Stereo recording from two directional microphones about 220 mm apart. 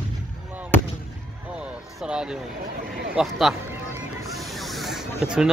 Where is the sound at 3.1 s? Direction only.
Centre (ahead or behind).